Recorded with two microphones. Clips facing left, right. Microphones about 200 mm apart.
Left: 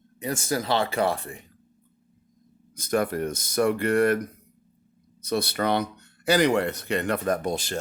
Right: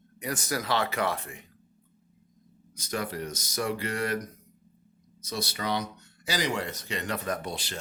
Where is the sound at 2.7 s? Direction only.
55° left (ahead or behind).